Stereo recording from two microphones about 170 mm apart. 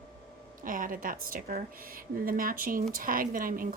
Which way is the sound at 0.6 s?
55° right (ahead or behind).